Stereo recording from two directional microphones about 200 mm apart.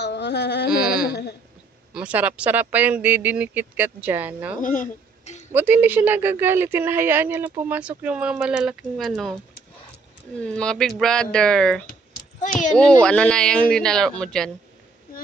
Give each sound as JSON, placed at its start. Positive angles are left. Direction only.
{"t": 0.0, "sound": "carnatic music", "side_deg": 60}
{"t": 2.0, "sound": "speech", "side_deg": -5}
{"t": 4.6, "sound": "speech", "side_deg": 40}
{"t": 5.5, "sound": "speech", "side_deg": -10}
{"t": 10.4, "sound": "speech", "side_deg": 5}